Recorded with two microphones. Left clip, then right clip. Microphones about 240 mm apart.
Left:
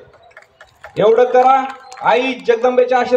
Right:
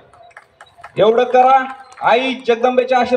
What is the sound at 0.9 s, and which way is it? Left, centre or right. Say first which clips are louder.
A man's voice: left 1 dB; right.